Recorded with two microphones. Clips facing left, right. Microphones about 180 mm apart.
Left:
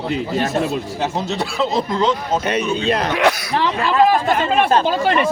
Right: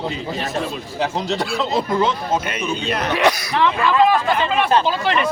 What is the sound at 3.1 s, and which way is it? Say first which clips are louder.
Speech: right 2 dB; 10° left (ahead or behind).